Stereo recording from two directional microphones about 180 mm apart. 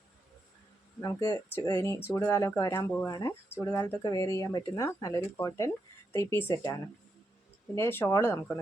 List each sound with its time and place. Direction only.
1.0 s speech: 20° left (ahead or behind)
7.8 s speech: 15° left (ahead or behind)